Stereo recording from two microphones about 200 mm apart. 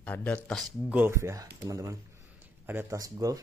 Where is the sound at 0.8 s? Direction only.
10° right (ahead or behind).